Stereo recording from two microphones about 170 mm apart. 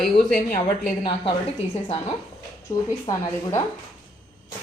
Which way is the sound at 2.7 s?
20° left (ahead or behind).